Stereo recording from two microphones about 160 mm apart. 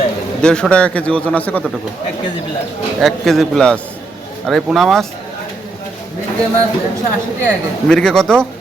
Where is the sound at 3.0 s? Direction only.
Centre (ahead or behind).